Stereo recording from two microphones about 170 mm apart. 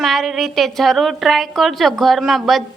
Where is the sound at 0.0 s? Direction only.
Centre (ahead or behind).